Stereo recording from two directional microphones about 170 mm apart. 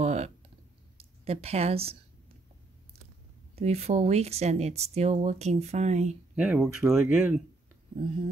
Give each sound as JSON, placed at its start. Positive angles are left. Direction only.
{"t": 0.0, "sound": "clicking", "side_deg": -40}
{"t": 0.9, "sound": "speech", "side_deg": -35}
{"t": 3.5, "sound": "speech", "side_deg": -40}
{"t": 6.3, "sound": "speech", "side_deg": -5}